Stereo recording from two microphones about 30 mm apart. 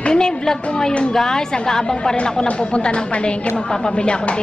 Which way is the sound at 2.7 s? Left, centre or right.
Left.